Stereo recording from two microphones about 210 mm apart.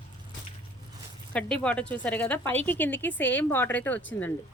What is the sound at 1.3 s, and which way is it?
A woman's voice, 5° left (ahead or behind).